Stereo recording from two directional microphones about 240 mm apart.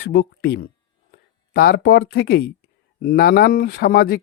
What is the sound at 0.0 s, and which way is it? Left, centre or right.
Speech, left.